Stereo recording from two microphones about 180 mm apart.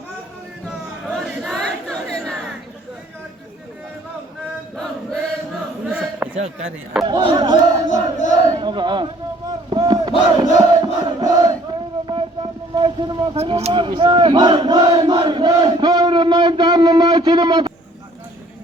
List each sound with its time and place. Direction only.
1.1 s crowd: centre (ahead or behind)
5.8 s a sound: 10° right (ahead or behind)
6.3 s chop: 40° right (ahead or behind)
7.1 s speech: 25° right (ahead or behind)
7.9 s chant: 45° left (ahead or behind)
8.3 s speech: 25° right (ahead or behind)
9.5 s battle cry: 25° right (ahead or behind)